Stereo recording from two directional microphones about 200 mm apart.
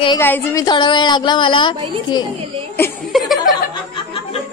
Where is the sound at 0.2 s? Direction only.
10° left (ahead or behind).